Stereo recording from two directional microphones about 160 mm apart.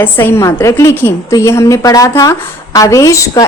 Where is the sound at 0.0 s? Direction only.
15° left (ahead or behind).